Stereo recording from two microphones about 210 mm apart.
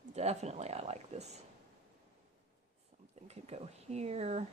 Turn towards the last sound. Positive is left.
turn(degrees=-30)  # may be behind; listen again after turning